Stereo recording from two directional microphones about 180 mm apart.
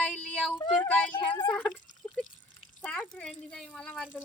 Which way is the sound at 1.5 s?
5° left (ahead or behind).